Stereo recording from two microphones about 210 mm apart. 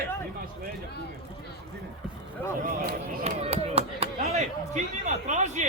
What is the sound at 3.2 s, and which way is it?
Speech, 30° right (ahead or behind).